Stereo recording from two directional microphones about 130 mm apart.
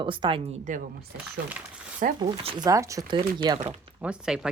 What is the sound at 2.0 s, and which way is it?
Speech, 90° right.